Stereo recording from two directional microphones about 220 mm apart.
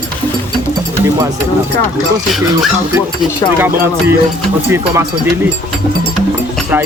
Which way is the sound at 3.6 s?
10° right (ahead or behind).